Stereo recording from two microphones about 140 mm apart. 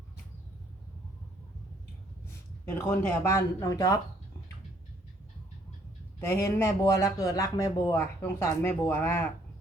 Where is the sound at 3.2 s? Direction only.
20° left (ahead or behind).